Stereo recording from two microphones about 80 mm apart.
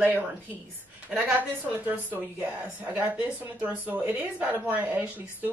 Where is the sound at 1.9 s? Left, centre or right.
Right.